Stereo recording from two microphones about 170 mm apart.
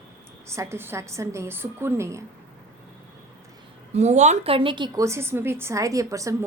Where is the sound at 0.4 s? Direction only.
15° right (ahead or behind).